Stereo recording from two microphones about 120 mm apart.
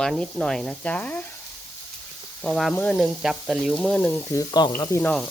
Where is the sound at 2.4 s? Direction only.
5° left (ahead or behind).